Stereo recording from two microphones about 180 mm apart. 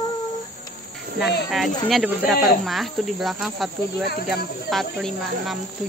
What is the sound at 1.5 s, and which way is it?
Speech, centre (ahead or behind).